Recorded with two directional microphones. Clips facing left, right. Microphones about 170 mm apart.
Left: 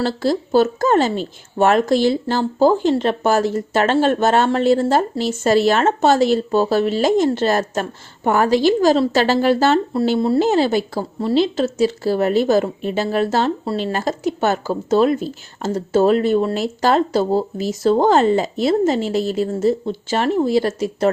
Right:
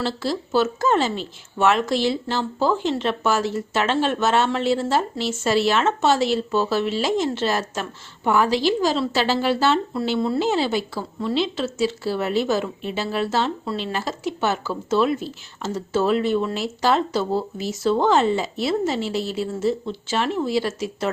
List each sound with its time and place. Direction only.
0.0 s speech: 45° left (ahead or behind)